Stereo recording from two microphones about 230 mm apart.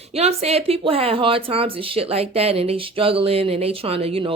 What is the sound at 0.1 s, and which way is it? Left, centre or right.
Speech, right.